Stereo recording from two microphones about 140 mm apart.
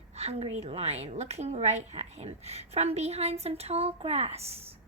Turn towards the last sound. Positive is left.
turn(degrees=-45)  # may be behind; listen again after turning